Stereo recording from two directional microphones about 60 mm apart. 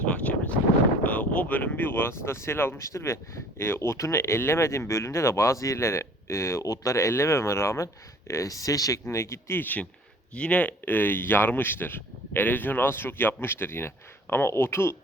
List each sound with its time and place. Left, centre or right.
0.0 s wind noise: left
1.0 s speech: left
2.8 s speech: left
8.3 s speech: left
9.0 s speech: left
9.6 s speech: left
10.3 s speech: centre; by 14.9 s left